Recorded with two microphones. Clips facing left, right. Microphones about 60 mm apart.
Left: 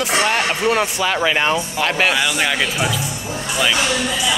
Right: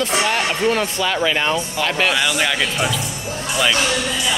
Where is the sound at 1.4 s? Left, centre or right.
Centre.